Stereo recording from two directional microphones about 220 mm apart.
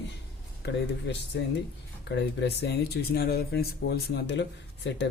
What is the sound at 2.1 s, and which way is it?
Speech, 50° left (ahead or behind).